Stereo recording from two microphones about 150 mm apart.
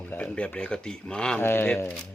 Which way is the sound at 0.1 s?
10° left (ahead or behind).